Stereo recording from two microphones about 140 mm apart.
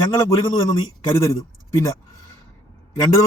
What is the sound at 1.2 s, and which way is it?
Speech, 25° left (ahead or behind).